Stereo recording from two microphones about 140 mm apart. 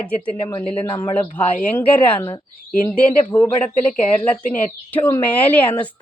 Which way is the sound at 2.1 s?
35° left (ahead or behind).